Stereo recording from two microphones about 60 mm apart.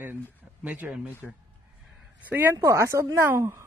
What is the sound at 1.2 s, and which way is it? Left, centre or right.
Speech, centre.